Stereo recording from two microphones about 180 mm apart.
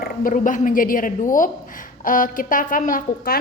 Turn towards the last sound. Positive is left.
turn(degrees=55)  # may be behind; listen again after turning